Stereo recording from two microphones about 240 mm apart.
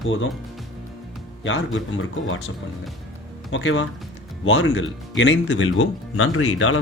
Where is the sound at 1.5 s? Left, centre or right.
Left.